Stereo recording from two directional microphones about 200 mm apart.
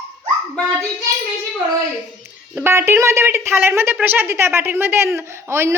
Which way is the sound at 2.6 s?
10° right (ahead or behind).